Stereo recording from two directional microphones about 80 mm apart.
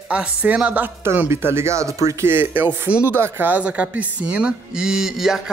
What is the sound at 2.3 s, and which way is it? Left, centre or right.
Speech, right.